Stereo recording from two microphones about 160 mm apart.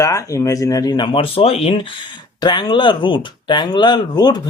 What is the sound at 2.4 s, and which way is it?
Speech, 30° left (ahead or behind).